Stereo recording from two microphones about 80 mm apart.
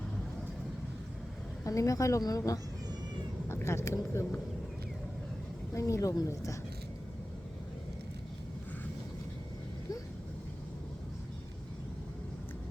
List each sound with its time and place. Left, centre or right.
1.6 s a woman's voice: left
3.5 s speech: left
5.7 s a woman's voice: left